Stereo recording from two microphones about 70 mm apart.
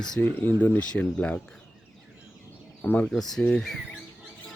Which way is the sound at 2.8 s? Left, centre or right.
Left.